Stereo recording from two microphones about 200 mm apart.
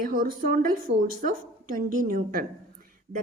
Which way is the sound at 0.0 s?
45° right (ahead or behind).